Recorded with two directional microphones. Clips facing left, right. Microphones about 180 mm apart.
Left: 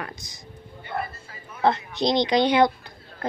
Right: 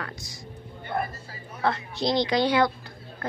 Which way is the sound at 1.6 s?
20° left (ahead or behind).